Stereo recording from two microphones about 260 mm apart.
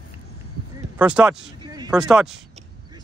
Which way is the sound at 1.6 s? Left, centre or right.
Centre.